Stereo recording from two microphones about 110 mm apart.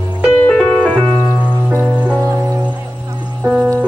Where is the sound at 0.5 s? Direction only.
10° left (ahead or behind).